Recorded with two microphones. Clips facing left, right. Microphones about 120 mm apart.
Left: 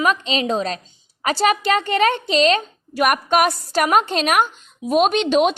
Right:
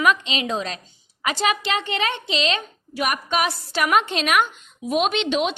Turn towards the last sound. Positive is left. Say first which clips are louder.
# left 6 dB
turn(degrees=45)  # may be behind; listen again after turning